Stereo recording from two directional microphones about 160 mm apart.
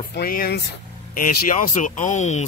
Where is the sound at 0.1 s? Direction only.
65° left (ahead or behind).